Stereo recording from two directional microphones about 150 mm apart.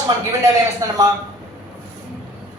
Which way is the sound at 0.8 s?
25° right (ahead or behind).